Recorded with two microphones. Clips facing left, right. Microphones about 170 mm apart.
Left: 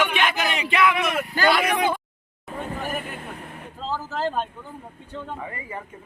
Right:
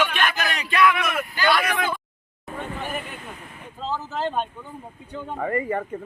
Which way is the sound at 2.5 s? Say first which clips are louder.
Left 1 dB; 5° left (ahead or behind).